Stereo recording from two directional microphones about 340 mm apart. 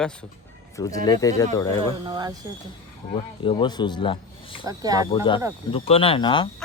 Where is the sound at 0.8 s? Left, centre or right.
Centre.